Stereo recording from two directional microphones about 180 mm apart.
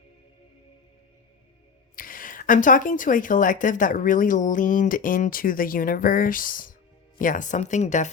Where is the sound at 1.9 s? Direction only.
50° left (ahead or behind).